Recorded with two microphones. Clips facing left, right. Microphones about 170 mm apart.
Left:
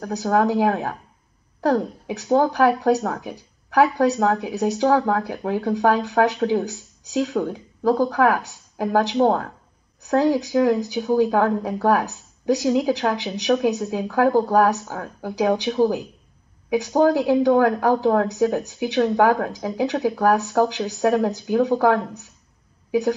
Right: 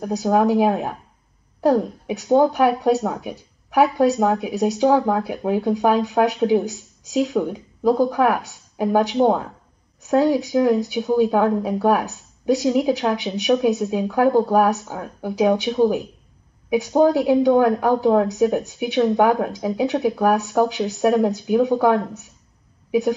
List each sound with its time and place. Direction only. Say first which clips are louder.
0.0 s speech: right 2 dB; 20° right (ahead or behind)